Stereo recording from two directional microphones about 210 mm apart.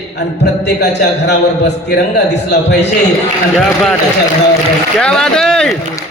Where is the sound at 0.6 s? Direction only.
55° left (ahead or behind).